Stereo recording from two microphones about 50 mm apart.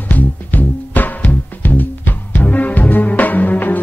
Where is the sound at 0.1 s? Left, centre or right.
Left.